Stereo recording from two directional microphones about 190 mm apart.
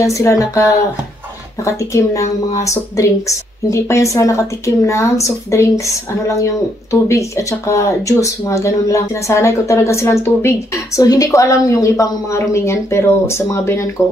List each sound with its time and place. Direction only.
0.0 s speech: 15° left (ahead or behind)